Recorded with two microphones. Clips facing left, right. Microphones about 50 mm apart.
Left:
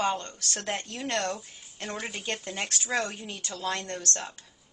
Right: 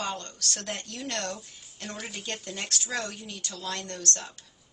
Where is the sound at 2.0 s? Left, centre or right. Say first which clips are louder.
Left 2 dB; centre.